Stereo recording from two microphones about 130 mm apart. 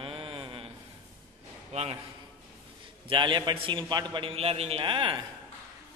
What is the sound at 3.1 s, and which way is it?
A man's voice, 35° right (ahead or behind).